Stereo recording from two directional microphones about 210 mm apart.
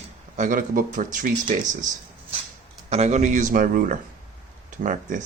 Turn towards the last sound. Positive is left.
turn(degrees=-40)  # may be behind; listen again after turning